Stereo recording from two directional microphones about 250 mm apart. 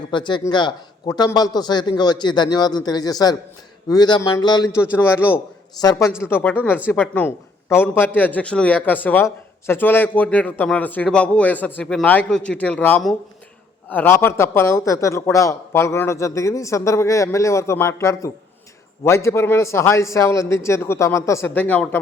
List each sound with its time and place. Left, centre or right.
0.1 s speech: centre